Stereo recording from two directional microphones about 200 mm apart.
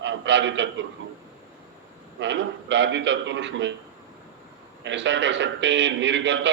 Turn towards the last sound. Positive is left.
turn(degrees=-65)  # may be behind; listen again after turning